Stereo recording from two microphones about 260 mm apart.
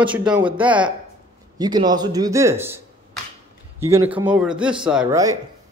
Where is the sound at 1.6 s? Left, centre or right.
Centre.